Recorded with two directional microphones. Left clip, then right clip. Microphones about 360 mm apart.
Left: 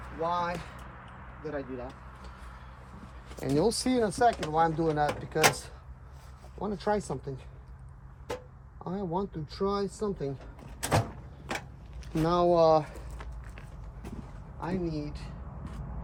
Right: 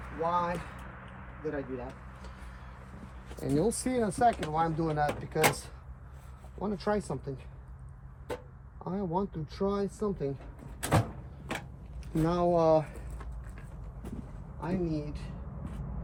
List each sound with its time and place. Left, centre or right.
0.2 s speech: centre
1.4 s a sound: centre
3.3 s speech: centre
8.8 s speech: left
12.1 s speech: left
14.6 s a sound: centre